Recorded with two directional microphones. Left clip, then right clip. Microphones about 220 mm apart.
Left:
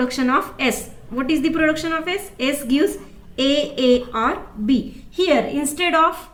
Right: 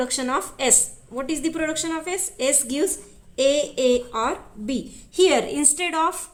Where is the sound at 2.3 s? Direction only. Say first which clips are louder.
Left 2 dB; 40° right (ahead or behind).